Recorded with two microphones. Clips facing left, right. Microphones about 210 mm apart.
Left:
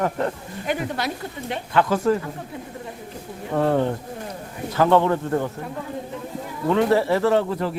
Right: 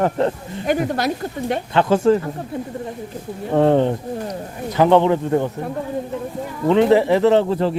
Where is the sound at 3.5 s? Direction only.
25° right (ahead or behind).